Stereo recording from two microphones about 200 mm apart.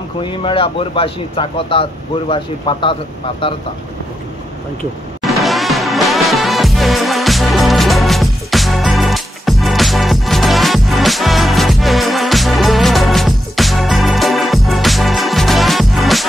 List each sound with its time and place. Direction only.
0.2 s a man's voice: 25° left (ahead or behind)
5.4 s music: centre (ahead or behind)